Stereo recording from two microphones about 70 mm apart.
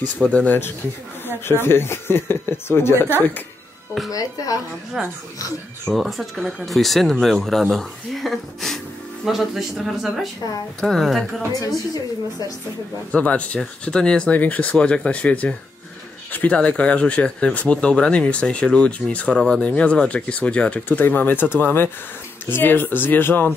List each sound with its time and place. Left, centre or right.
0.2 s speech: centre
1.2 s speech: left
4.1 s a woman's voice: left
5.0 s speech: centre
11.6 s a woman's voice: left
13.1 s speech: centre